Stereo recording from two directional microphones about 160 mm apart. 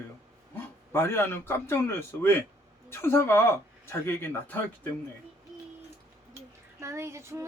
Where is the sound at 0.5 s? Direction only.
15° left (ahead or behind).